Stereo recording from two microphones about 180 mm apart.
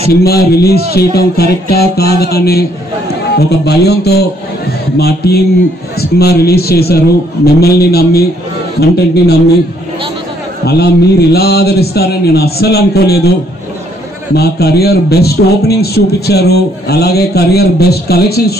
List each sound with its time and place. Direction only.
0.1 s a man's voice: 60° left (ahead or behind)
10.6 s a man's voice: 65° left (ahead or behind)
14.3 s a man's voice: 60° left (ahead or behind)